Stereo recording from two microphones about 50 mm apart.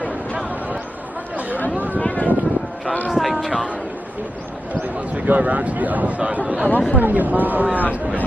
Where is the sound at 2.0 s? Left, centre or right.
Left.